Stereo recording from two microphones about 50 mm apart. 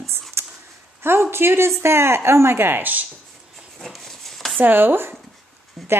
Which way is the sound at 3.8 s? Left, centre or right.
Centre.